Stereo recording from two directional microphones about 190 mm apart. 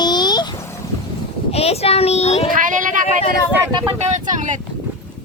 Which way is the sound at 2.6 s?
45° right (ahead or behind).